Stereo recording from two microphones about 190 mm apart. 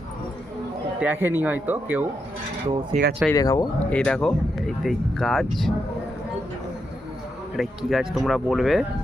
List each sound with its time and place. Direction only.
0.9 s speech: 10° right (ahead or behind)
2.9 s speech: 60° right (ahead or behind)
3.3 s speech: 15° left (ahead or behind)
3.9 s speech: 5° left (ahead or behind)
7.5 s speech: centre (ahead or behind)